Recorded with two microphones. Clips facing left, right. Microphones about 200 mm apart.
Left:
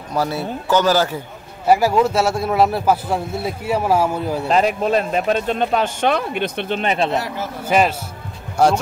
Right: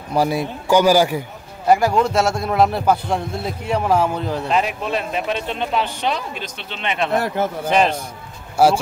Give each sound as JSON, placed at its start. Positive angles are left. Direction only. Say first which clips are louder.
{"t": 0.1, "sound": "a man's voice", "louder": "right 2 dB", "side_deg": -15}
{"t": 1.7, "sound": "a man's voice", "louder": "left 1 dB", "side_deg": 5}
{"t": 4.5, "sound": "speech", "louder": "left 6 dB", "side_deg": 40}
{"t": 7.2, "sound": "speech", "louder": "right 4 dB", "side_deg": -55}
{"t": 7.6, "sound": "speech", "louder": "left 2 dB", "side_deg": 10}
{"t": 8.6, "sound": "a man's voice", "louder": "right 1 dB", "side_deg": -5}